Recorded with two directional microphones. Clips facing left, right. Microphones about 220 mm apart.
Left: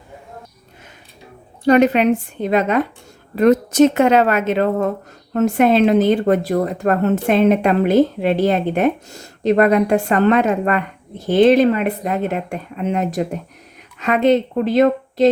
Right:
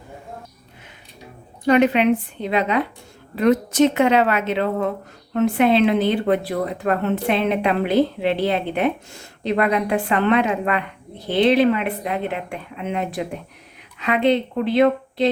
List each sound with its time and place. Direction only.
1.6 s speech: 40° left (ahead or behind)